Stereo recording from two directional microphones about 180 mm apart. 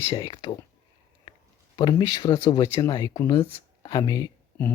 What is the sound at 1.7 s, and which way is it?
Speech, 25° left (ahead or behind).